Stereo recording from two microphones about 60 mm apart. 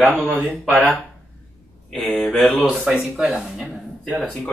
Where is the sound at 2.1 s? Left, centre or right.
Centre.